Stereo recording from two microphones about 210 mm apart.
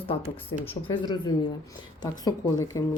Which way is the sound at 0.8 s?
20° left (ahead or behind).